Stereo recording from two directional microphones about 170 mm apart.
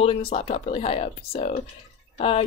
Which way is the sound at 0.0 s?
35° left (ahead or behind).